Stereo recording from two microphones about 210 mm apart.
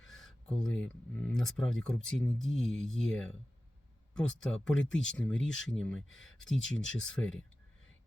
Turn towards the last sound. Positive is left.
turn(degrees=5)  # may be behind; listen again after turning